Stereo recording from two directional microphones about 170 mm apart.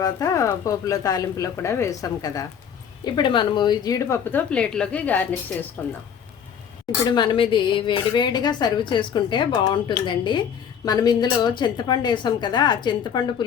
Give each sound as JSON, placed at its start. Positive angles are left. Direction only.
{"t": 0.0, "sound": "a woman's voice", "side_deg": 20}
{"t": 7.1, "sound": "a woman's voice", "side_deg": 30}